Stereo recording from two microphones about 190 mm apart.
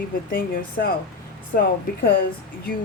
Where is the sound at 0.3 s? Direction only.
50° left (ahead or behind).